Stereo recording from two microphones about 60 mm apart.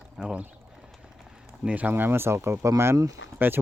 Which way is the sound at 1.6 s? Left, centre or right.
Right.